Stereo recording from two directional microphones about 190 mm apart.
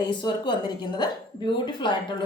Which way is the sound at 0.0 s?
20° left (ahead or behind).